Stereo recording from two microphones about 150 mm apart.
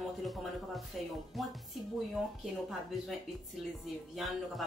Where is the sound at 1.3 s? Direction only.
Centre (ahead or behind).